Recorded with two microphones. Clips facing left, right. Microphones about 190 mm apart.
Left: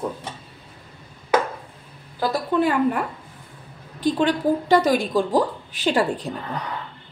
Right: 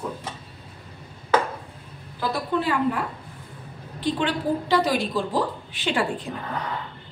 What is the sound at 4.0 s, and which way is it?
A woman's voice, 45° left (ahead or behind).